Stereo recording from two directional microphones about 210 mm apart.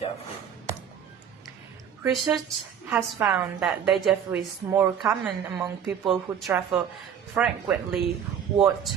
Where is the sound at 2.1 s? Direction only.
Centre (ahead or behind).